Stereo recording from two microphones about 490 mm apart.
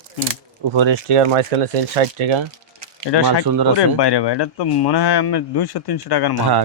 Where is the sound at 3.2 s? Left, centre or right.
Right.